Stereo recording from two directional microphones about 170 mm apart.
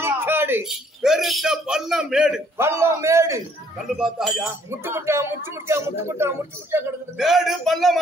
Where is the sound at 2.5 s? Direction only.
15° right (ahead or behind).